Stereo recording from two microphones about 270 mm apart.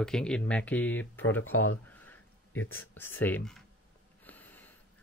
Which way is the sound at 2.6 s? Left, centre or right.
Left.